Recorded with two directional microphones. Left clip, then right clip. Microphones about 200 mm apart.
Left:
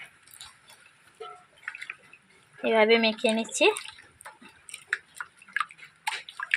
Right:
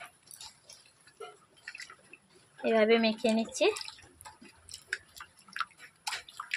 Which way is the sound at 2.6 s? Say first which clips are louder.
Left 4 dB; 20° left (ahead or behind).